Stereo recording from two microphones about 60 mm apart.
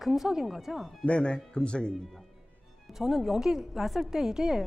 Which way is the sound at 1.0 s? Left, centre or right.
Centre.